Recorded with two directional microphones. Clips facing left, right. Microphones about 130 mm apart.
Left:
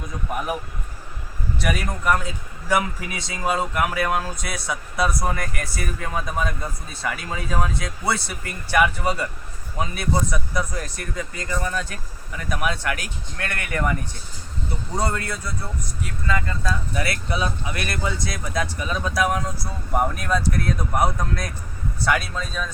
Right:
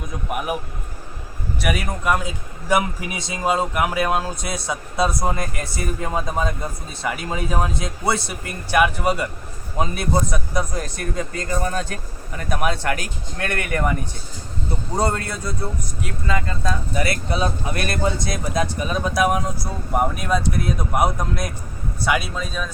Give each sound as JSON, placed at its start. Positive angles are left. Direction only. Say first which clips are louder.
{"t": 0.3, "sound": "speech", "louder": "right 2 dB", "side_deg": -10}
{"t": 1.6, "sound": "a man's voice", "louder": "right 1 dB", "side_deg": -10}
{"t": 11.6, "sound": "speech", "louder": "right 2 dB", "side_deg": -40}
{"t": 12.5, "sound": "a man's voice", "louder": "right 3 dB", "side_deg": -30}
{"t": 14.9, "sound": "a man's voice", "louder": "right 3 dB", "side_deg": -25}